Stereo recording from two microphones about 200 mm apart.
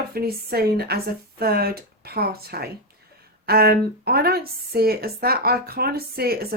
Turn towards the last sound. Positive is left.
turn(degrees=-50)  # may be behind; listen again after turning